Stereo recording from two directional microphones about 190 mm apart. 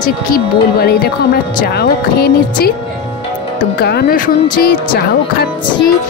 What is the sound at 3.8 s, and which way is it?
Speech, 60° left (ahead or behind).